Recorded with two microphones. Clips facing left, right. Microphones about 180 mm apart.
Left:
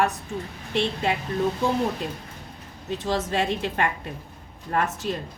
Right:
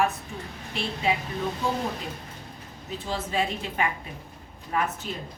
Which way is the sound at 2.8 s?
85° left.